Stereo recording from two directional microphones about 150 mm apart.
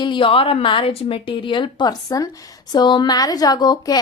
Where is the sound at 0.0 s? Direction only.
35° left (ahead or behind).